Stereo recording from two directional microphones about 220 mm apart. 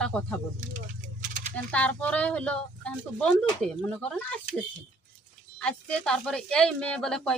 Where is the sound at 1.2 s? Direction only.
40° right (ahead or behind).